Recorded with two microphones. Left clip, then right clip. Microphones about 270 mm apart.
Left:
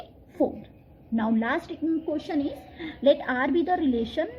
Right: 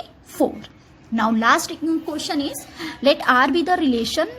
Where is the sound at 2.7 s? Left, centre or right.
Right.